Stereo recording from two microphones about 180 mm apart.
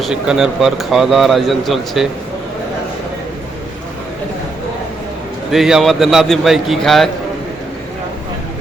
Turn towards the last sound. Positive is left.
turn(degrees=0)  # may be behind; listen again after turning